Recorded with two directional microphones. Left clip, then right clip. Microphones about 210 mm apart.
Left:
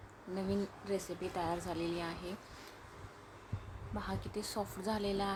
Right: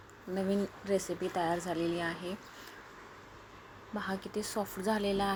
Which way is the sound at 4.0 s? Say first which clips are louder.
Right 5 dB; 10° right (ahead or behind).